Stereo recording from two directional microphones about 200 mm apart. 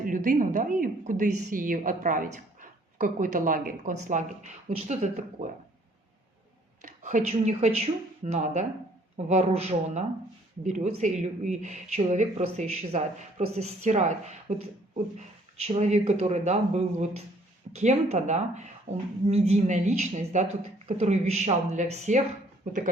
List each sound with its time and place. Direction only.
0.0 s a woman's voice: 40° right (ahead or behind)
6.8 s a woman's voice: 40° right (ahead or behind)